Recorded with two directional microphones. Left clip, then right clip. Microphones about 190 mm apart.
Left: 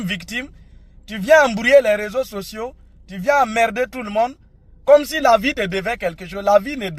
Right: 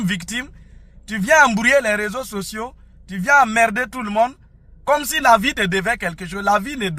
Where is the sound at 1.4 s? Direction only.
25° right (ahead or behind).